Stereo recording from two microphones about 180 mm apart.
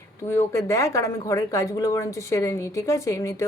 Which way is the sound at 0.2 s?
15° left (ahead or behind).